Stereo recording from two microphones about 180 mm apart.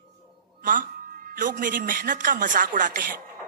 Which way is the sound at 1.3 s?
50° right (ahead or behind).